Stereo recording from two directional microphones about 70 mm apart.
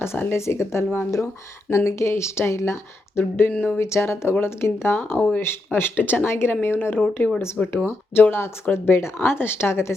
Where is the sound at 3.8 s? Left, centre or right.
Left.